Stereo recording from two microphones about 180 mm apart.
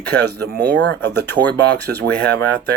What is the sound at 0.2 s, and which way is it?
Speech, 65° right (ahead or behind).